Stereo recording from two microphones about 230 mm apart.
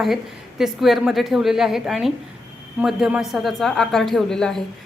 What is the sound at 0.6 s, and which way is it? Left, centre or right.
A woman's voice, centre.